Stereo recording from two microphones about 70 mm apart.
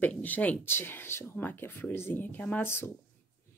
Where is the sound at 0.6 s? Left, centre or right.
Left.